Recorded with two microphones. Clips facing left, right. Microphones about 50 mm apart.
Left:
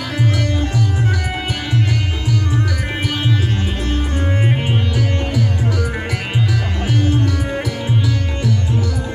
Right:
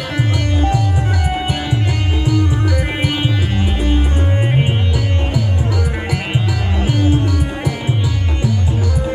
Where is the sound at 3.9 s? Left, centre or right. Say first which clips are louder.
Even; centre.